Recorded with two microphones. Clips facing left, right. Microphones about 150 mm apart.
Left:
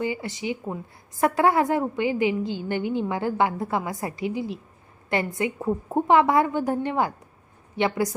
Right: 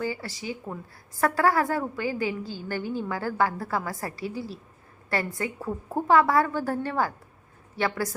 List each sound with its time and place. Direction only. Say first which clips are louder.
0.0 s a woman's voice: left 3 dB; 20° left (ahead or behind)